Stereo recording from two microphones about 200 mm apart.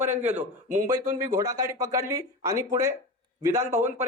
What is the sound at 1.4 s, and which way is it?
A man's voice, 15° right (ahead or behind).